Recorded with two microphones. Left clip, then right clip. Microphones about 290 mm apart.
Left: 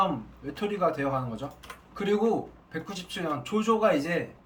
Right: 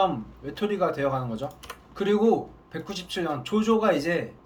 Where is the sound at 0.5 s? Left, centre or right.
Centre.